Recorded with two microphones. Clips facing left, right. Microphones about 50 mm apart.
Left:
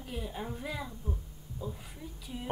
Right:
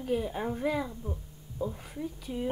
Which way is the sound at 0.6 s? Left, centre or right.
Right.